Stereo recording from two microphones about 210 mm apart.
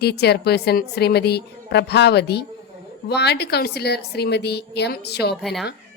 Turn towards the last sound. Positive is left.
turn(degrees=0)  # may be behind; listen again after turning